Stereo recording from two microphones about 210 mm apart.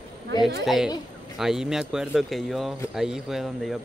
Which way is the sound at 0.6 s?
Centre (ahead or behind).